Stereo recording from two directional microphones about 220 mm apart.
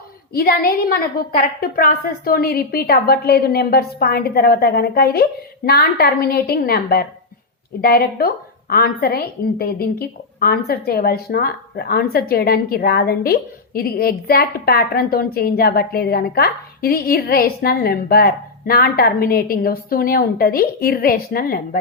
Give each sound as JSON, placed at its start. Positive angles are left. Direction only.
{"t": 0.3, "sound": "a woman's voice", "side_deg": 45}